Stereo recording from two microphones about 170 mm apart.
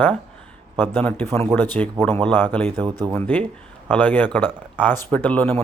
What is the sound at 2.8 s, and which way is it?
Speech, 25° right (ahead or behind).